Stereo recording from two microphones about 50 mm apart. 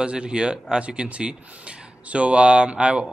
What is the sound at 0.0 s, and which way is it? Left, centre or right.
Speech, right.